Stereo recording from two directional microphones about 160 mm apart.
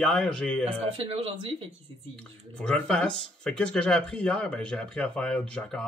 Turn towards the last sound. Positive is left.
turn(degrees=5)  # may be behind; listen again after turning